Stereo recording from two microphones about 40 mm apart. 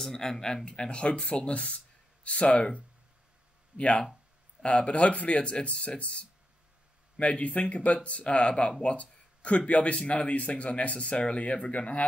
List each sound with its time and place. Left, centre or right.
0.0 s speech: centre; by 8.7 s left
8.8 s a sound: left
9.6 s speech: left